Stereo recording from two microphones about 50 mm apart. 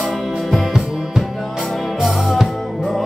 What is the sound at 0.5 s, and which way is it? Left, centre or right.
Music, centre.